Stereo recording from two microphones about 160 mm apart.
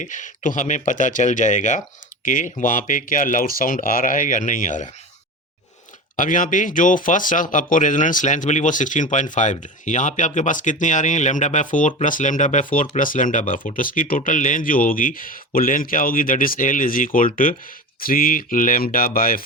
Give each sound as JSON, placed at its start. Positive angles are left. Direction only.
{"t": 0.0, "sound": "speech", "side_deg": 50}
{"t": 6.1, "sound": "speech", "side_deg": 55}